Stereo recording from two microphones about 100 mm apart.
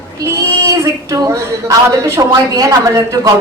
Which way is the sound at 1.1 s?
35° right (ahead or behind).